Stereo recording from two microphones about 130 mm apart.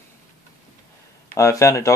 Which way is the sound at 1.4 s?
25° left (ahead or behind).